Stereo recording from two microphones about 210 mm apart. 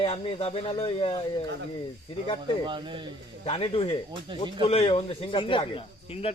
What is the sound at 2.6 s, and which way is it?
Speech, 25° right (ahead or behind).